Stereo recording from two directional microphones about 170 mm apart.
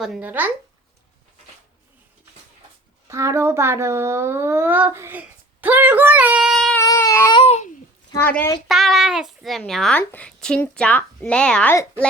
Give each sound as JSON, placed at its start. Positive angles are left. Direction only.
{"t": 0.0, "sound": "speech", "side_deg": -5}
{"t": 3.1, "sound": "speech", "side_deg": -15}
{"t": 6.8, "sound": "baby cry", "side_deg": 20}
{"t": 7.3, "sound": "babbling", "side_deg": 35}
{"t": 8.1, "sound": "a woman's voice", "side_deg": 10}
{"t": 8.6, "sound": "a child's voice", "side_deg": 0}